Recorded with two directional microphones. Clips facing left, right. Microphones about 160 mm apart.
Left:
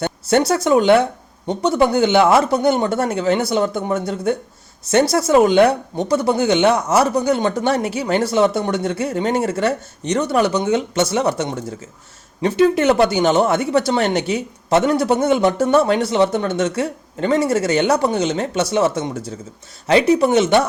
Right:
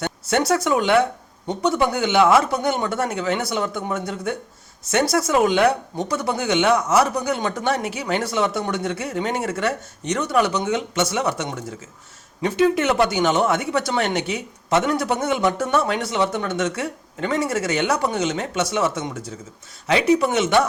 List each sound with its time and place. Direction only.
0.0 s speech: 30° left (ahead or behind)